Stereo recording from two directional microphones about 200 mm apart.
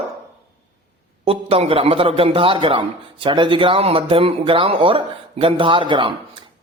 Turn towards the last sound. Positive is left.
turn(degrees=-25)  # may be behind; listen again after turning